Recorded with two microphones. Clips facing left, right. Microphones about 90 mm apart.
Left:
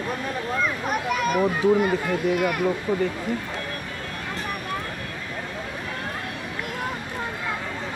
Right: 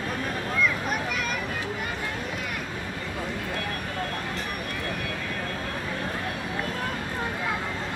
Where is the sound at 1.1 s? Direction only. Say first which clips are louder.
Left 8 dB; 45° left (ahead or behind).